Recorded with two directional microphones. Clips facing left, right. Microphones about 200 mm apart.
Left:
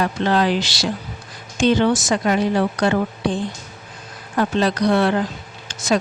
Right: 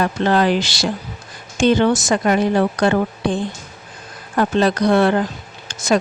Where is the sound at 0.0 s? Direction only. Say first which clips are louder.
Right 2 dB; 50° right (ahead or behind).